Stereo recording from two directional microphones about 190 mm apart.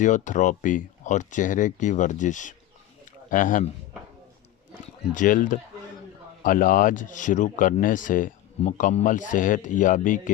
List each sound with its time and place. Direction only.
0.0 s a man's voice: 40° left (ahead or behind)
4.7 s speech: 45° left (ahead or behind)